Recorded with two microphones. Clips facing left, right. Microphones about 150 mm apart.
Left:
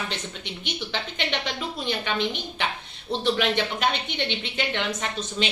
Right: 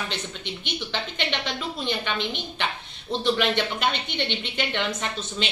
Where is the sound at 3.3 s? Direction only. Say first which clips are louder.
Even; 5° left (ahead or behind).